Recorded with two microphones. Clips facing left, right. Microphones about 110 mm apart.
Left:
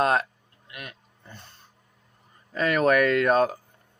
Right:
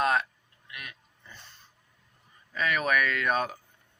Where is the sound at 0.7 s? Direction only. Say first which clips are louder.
Left 3 dB; 30° left (ahead or behind).